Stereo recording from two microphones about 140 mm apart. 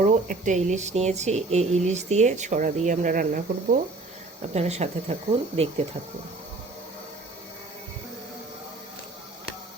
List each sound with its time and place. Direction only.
0.0 s speech: 60° right (ahead or behind); by 3.8 s 80° right
4.5 s speech: 50° right (ahead or behind)